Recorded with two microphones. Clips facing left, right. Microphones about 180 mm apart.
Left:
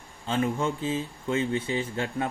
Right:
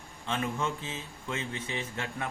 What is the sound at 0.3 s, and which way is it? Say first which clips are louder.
Speech: left 5 dB; 30° left (ahead or behind).